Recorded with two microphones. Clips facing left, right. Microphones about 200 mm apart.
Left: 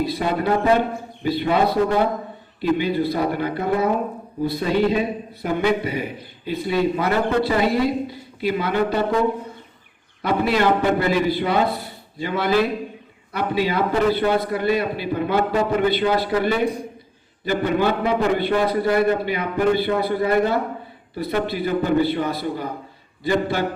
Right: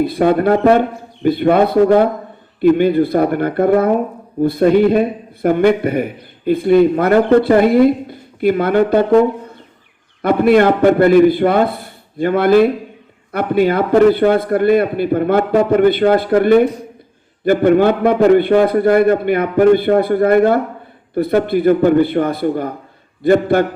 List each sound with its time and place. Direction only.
0.0 s a man's voice: 55° right (ahead or behind)
10.2 s a man's voice: 55° right (ahead or behind)